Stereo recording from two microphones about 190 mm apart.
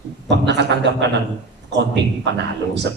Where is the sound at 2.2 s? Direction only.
65° right (ahead or behind).